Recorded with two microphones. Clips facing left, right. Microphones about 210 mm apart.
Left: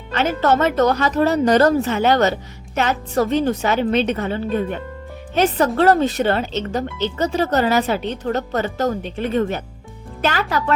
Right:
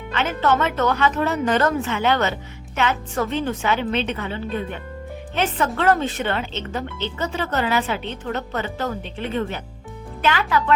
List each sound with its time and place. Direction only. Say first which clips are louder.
0.1 s speech: left 3 dB; 40° left (ahead or behind)